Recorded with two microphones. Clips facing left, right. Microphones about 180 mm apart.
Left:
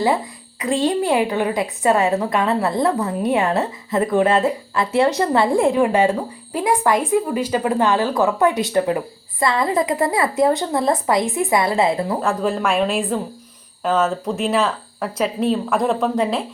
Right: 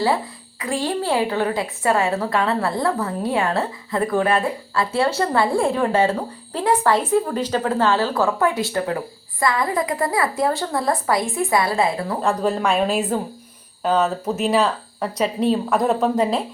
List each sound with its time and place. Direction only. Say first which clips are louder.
0.6 s a woman's voice: left 4 dB; 20° left (ahead or behind)
12.2 s speech: even; centre (ahead or behind)